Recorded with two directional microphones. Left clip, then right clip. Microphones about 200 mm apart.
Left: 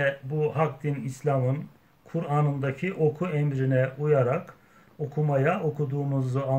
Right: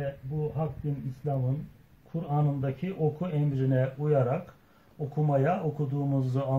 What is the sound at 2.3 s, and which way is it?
Speech, 5° left (ahead or behind).